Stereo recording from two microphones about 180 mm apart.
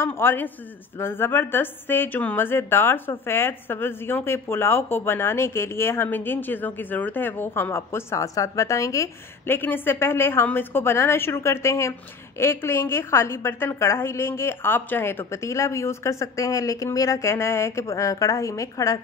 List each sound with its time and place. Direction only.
0.0 s a woman's voice: 10° left (ahead or behind)